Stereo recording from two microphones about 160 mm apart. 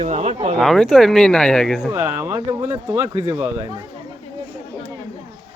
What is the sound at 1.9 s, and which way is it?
Speech, 15° right (ahead or behind).